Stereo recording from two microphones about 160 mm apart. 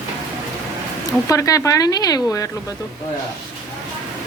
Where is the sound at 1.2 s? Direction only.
20° left (ahead or behind).